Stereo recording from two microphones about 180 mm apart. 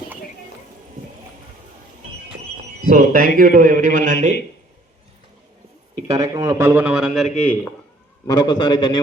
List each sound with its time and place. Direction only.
2.8 s a man's voice: 50° right (ahead or behind)
6.1 s a man's voice: 20° right (ahead or behind); by 7.7 s 5° left (ahead or behind)
8.3 s a man's voice: 25° left (ahead or behind)